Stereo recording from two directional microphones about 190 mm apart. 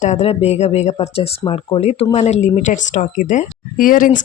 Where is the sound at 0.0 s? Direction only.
35° left (ahead or behind).